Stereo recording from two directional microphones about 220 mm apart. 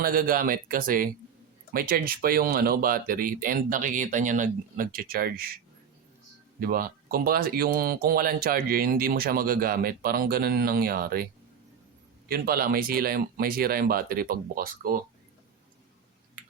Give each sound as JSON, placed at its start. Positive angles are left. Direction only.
{"t": 0.0, "sound": "speech", "side_deg": -40}
{"t": 6.6, "sound": "speech", "side_deg": -40}
{"t": 12.3, "sound": "speech", "side_deg": -40}